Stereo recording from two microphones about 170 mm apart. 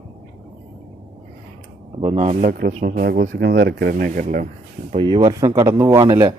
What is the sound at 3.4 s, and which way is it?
Speech, 75° right (ahead or behind).